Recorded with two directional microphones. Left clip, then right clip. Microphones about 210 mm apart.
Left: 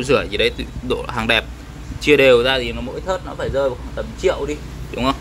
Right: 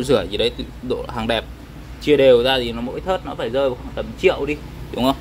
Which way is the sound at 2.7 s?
30° right (ahead or behind).